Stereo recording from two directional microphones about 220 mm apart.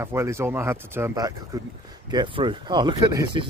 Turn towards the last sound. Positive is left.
turn(degrees=-20)  # may be behind; listen again after turning